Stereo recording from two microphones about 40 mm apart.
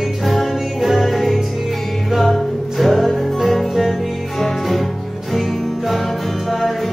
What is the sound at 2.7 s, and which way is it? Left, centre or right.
Music, centre.